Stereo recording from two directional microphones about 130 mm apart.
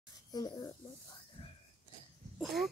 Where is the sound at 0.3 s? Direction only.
30° left (ahead or behind).